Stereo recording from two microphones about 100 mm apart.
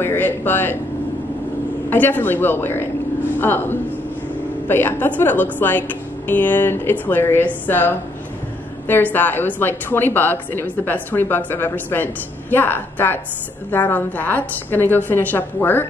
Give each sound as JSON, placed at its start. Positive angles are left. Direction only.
{"t": 0.0, "sound": "a woman's voice", "side_deg": 20}
{"t": 1.9, "sound": "a woman's voice", "side_deg": 20}